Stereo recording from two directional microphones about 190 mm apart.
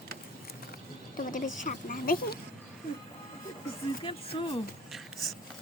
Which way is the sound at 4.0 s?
25° left (ahead or behind).